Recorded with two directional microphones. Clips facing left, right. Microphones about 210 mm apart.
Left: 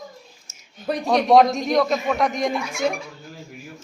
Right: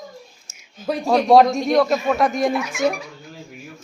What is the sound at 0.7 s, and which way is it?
A man's voice, centre (ahead or behind).